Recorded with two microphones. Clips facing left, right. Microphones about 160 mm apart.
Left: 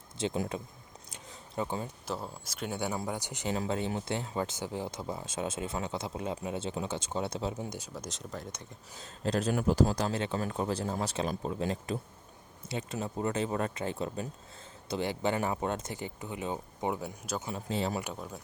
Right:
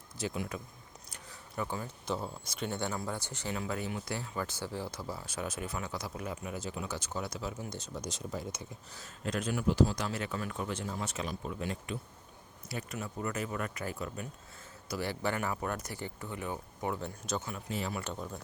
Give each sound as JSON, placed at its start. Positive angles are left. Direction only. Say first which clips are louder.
{"t": 0.3, "sound": "speech", "louder": "left 5 dB", "side_deg": 25}
{"t": 1.1, "sound": "a sound", "louder": "left 3 dB", "side_deg": 20}
{"t": 2.0, "sound": "speech", "louder": "right 1 dB", "side_deg": 5}
{"t": 3.5, "sound": "speech", "louder": "left 4 dB", "side_deg": 30}
{"t": 7.9, "sound": "speech", "louder": "right 2 dB", "side_deg": 0}
{"t": 9.0, "sound": "a man's voice", "louder": "left 5 dB", "side_deg": 35}
{"t": 17.0, "sound": "speech", "louder": "even", "side_deg": 10}
{"t": 17.4, "sound": "speech", "louder": "left 4 dB", "side_deg": 30}
{"t": 18.0, "sound": "speech", "louder": "even", "side_deg": 5}